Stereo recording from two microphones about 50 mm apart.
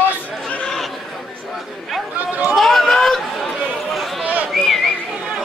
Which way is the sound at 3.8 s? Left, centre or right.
Centre.